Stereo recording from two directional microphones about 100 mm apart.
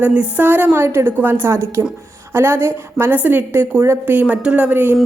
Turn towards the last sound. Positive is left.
turn(degrees=-20)  # may be behind; listen again after turning